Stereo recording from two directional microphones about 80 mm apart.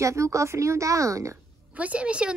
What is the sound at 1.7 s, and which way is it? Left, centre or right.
Speech, centre.